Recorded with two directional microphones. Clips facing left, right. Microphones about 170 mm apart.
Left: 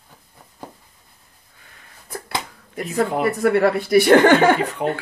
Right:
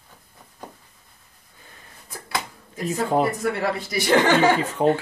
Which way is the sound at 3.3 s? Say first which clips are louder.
Left 7 dB; 60° left (ahead or behind).